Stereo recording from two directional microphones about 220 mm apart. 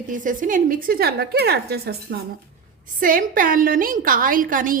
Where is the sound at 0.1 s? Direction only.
35° right (ahead or behind).